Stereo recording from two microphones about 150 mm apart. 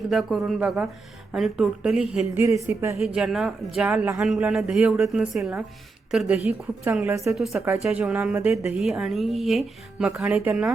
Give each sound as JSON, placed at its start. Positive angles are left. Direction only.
{"t": 0.1, "sound": "a woman's voice", "side_deg": 0}
{"t": 3.0, "sound": "a woman's voice", "side_deg": -5}
{"t": 7.3, "sound": "a woman's voice", "side_deg": 0}